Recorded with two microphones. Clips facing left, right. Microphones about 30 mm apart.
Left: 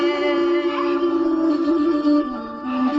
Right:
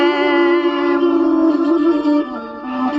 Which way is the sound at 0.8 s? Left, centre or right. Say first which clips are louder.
Right 5 dB; right.